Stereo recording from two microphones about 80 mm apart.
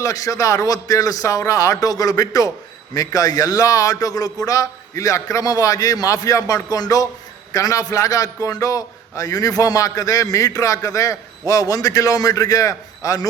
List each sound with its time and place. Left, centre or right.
0.0 s a man's voice: left